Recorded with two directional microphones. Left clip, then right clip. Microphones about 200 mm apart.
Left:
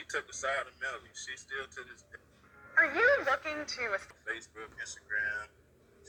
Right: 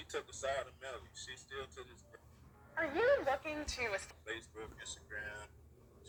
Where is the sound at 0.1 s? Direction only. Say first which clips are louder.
Left 6 dB; 15° right (ahead or behind).